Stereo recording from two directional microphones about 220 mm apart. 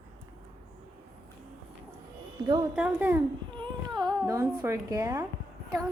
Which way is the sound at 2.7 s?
5° right (ahead or behind).